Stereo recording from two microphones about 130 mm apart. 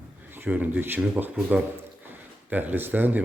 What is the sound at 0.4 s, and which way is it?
Speech, 10° right (ahead or behind).